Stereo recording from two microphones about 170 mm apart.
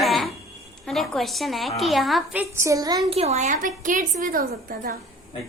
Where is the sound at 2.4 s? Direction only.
15° right (ahead or behind).